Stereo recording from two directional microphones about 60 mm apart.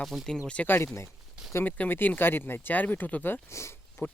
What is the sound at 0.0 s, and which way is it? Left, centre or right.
Speech, centre.